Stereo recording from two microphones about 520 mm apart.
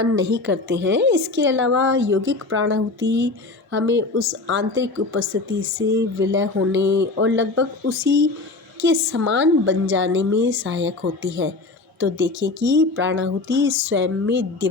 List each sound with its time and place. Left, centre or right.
0.0 s a woman's voice: right